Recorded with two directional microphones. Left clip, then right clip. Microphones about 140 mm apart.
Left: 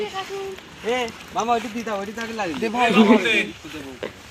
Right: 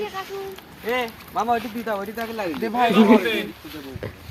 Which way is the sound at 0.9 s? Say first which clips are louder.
Left 1 dB; 85° left.